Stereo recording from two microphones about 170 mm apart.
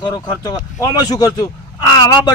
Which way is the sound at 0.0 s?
25° left (ahead or behind).